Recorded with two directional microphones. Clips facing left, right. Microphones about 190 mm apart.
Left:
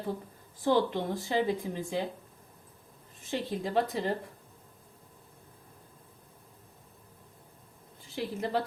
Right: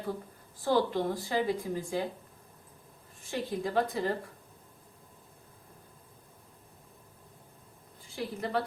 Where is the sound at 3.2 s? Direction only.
25° left (ahead or behind).